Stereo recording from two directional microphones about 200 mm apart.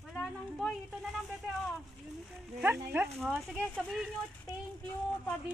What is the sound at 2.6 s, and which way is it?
Speech, 10° right (ahead or behind).